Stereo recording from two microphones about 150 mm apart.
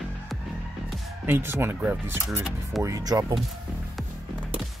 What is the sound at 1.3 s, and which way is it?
Speech, 15° right (ahead or behind).